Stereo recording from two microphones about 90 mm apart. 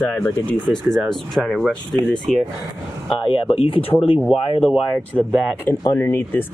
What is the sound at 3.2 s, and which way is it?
Speech, 90° left.